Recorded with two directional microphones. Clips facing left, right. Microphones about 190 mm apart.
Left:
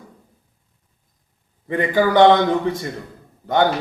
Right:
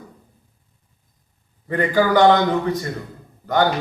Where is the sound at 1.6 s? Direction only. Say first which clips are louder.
Even; 20° left (ahead or behind).